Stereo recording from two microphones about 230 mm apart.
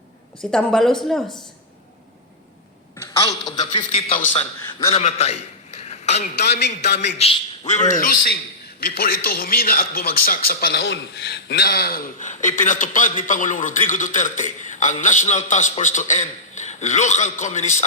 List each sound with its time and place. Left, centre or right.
0.5 s speech: centre
3.0 s a woman's voice: centre
5.8 s a sound: left
6.3 s a man's voice: left
7.2 s speech: left